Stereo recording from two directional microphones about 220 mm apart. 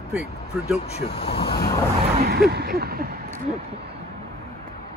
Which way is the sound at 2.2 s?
45° right (ahead or behind).